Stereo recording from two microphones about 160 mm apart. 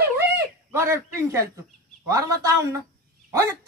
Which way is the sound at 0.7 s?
15° right (ahead or behind).